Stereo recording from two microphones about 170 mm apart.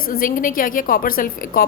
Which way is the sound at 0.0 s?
55° left (ahead or behind).